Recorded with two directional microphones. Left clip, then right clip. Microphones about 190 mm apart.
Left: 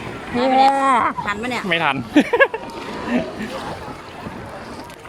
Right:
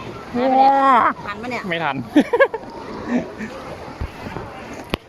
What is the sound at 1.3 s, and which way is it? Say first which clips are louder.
Speech: left 3 dB; 55° left (ahead or behind).